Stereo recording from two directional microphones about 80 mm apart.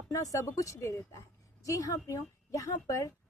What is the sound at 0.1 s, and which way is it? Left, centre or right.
A woman's voice, left.